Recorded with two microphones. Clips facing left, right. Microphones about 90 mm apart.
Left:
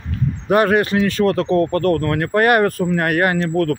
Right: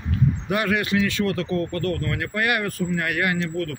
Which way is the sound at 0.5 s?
40° left (ahead or behind).